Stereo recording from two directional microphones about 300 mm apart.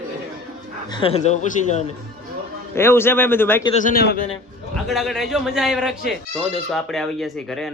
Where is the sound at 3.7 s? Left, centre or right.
Left.